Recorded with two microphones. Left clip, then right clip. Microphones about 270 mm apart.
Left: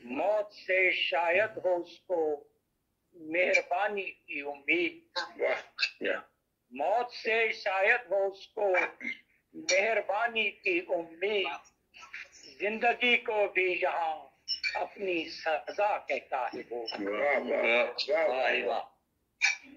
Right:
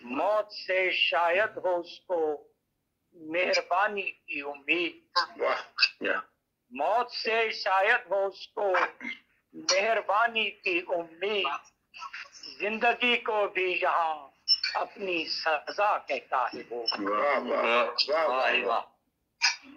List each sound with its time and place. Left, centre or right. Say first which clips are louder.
0.0 s a man's voice: right 2 dB; right